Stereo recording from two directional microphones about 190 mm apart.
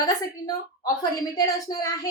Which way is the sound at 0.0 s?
20° left (ahead or behind).